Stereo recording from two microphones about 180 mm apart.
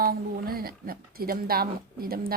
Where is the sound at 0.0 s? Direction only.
55° right (ahead or behind).